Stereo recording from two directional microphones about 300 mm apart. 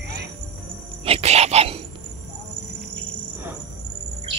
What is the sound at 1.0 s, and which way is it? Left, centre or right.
Cricket, centre.